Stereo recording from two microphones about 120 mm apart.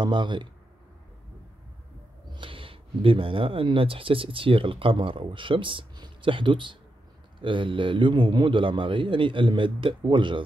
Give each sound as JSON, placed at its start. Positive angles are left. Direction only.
{"t": 0.0, "sound": "speech", "side_deg": -40}
{"t": 2.3, "sound": "a man's voice", "side_deg": -45}